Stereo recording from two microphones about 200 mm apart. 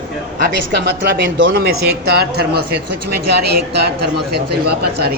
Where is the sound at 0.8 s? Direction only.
60° right (ahead or behind).